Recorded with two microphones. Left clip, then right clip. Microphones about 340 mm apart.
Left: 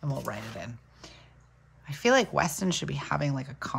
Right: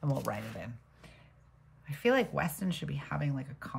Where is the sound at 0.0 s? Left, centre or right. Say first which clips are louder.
Even; centre.